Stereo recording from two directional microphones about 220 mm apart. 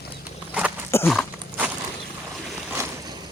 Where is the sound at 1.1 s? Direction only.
5° right (ahead or behind).